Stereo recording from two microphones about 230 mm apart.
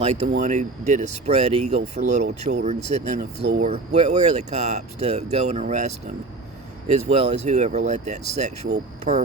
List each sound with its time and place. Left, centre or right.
0.0 s speech: right
3.3 s speech: right
3.6 s speech: right